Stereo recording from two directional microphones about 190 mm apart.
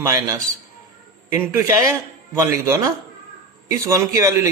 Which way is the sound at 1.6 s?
15° right (ahead or behind).